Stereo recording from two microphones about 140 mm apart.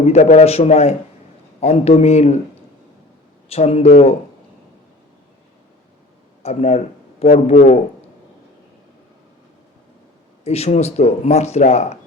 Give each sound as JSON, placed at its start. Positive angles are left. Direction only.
{"t": 0.0, "sound": "speech", "side_deg": 55}
{"t": 3.5, "sound": "speech", "side_deg": 50}
{"t": 6.4, "sound": "a man's voice", "side_deg": 50}
{"t": 10.4, "sound": "speech", "side_deg": 50}